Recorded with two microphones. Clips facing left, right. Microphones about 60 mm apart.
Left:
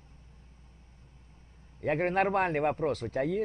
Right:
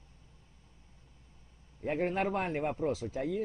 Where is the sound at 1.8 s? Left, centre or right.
Left.